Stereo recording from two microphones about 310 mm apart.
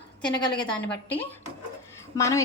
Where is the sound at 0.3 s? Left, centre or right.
Centre.